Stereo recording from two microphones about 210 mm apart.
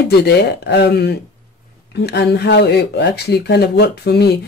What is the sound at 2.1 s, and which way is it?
Speech, 50° left (ahead or behind).